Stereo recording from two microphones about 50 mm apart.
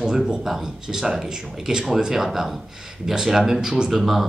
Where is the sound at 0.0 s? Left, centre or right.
Centre.